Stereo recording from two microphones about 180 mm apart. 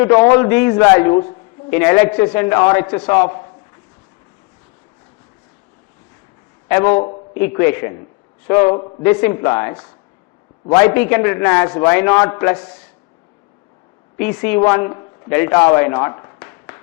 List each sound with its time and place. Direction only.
0.0 s a man's voice: 15° left (ahead or behind)
1.1 s a woman's voice: 25° left (ahead or behind)
1.7 s a man's voice: 10° left (ahead or behind)
6.7 s a man's voice: 10° left (ahead or behind)
14.2 s a man's voice: 10° left (ahead or behind)